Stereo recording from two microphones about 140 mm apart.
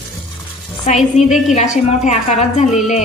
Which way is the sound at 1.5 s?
60° left (ahead or behind).